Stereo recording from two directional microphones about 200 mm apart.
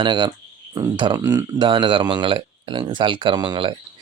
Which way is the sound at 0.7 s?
20° right (ahead or behind).